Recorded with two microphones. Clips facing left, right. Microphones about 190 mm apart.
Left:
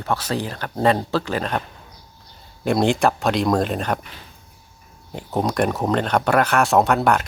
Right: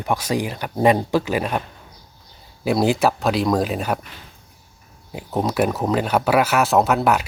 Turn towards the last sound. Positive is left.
turn(degrees=-5)  # may be behind; listen again after turning